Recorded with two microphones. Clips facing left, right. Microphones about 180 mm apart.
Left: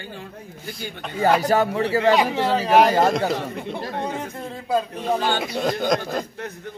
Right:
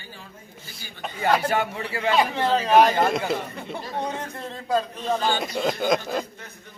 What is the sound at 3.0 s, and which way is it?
Speech, 40° left (ahead or behind).